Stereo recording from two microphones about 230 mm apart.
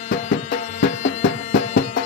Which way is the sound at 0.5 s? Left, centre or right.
Left.